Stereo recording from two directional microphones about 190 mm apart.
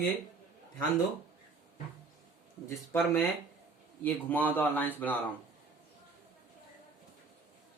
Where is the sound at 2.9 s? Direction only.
10° left (ahead or behind).